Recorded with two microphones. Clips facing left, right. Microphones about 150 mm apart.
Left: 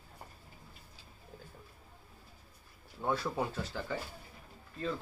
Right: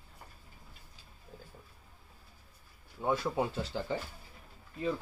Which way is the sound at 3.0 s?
20° right (ahead or behind).